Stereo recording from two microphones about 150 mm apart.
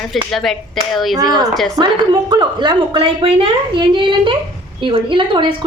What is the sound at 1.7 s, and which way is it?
Speech, 30° right (ahead or behind).